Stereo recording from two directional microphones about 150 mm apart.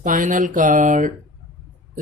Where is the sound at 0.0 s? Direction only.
60° right (ahead or behind).